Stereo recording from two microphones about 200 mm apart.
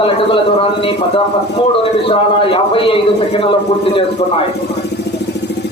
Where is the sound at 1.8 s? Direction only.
25° left (ahead or behind).